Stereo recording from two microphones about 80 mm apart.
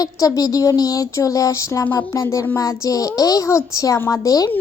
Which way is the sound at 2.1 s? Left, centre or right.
Left.